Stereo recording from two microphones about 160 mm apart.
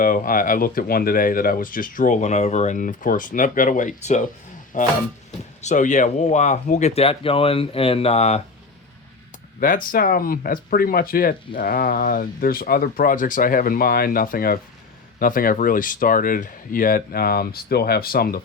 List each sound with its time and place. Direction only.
0.0 s speech: 60° left (ahead or behind); by 8.4 s 40° left (ahead or behind)
9.6 s speech: 60° left (ahead or behind)